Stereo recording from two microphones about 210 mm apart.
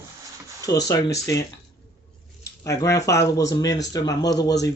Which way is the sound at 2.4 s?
15° left (ahead or behind).